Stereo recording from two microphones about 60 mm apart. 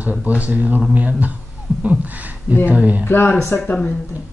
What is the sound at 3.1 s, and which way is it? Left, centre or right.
Speech, left.